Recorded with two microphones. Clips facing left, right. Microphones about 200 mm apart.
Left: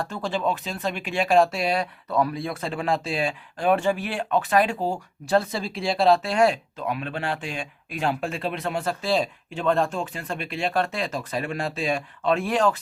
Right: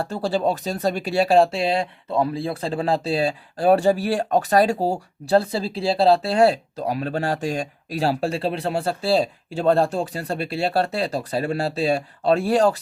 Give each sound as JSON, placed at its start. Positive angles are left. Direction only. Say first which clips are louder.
{"t": 0.0, "sound": "speech", "louder": "right 4 dB", "side_deg": -35}